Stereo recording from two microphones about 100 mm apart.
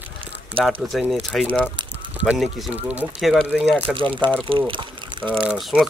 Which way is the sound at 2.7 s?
15° right (ahead or behind).